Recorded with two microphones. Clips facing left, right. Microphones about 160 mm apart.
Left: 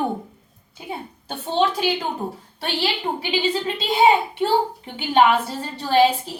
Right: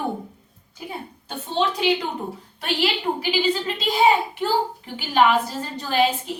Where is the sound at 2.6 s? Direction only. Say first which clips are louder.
Right 1 dB; 30° left (ahead or behind).